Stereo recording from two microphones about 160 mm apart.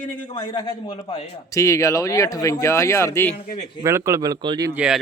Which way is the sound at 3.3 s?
45° left (ahead or behind).